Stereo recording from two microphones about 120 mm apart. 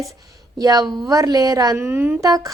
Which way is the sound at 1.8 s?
20° right (ahead or behind).